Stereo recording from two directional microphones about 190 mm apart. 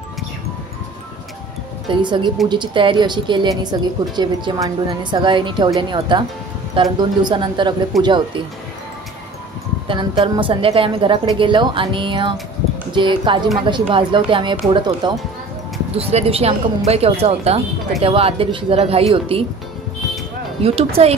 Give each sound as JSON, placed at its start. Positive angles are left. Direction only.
{"t": 1.9, "sound": "a woman's voice", "side_deg": -25}
{"t": 7.9, "sound": "speech", "side_deg": 0}
{"t": 9.8, "sound": "a woman's voice", "side_deg": -25}
{"t": 20.6, "sound": "a woman's voice", "side_deg": -30}